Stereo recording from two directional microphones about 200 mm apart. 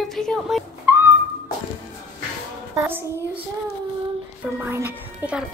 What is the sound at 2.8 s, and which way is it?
Speech, 10° right (ahead or behind).